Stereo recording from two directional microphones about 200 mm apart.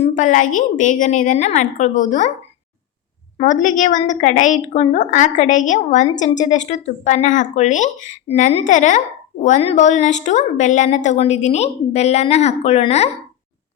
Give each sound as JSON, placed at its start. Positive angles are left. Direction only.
{"t": 0.0, "sound": "a woman's voice", "side_deg": 40}
{"t": 3.3, "sound": "a woman's voice", "side_deg": 40}